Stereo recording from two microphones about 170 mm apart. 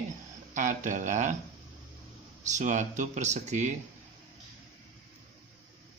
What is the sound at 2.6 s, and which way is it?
Speech, 45° right (ahead or behind).